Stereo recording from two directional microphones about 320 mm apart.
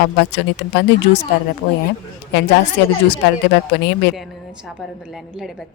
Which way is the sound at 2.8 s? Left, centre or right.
Left.